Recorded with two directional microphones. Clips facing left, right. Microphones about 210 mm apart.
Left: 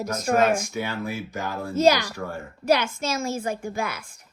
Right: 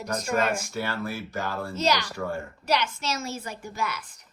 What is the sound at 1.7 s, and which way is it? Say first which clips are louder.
A woman's voice: left 8 dB; 50° left (ahead or behind).